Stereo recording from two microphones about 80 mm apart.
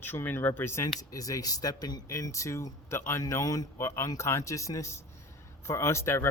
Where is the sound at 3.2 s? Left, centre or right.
Left.